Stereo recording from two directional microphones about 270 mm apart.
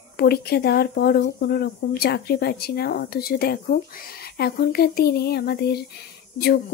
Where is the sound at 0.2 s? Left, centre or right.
Left.